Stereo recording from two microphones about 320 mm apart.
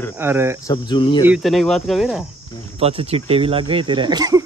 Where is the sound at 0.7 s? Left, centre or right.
Centre.